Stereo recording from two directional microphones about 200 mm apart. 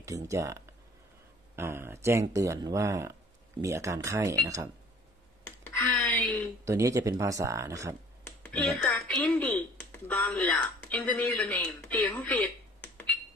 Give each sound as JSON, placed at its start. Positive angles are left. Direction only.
{"t": 0.0, "sound": "speech", "side_deg": -15}
{"t": 5.7, "sound": "a sound", "side_deg": 10}
{"t": 6.6, "sound": "speech", "side_deg": -15}
{"t": 8.4, "sound": "speech", "side_deg": 5}